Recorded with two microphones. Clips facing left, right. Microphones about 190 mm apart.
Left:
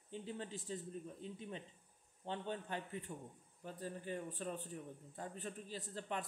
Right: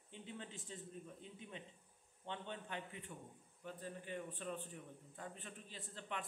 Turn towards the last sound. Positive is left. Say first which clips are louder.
# left 5 dB
turn(degrees=40)  # may be behind; listen again after turning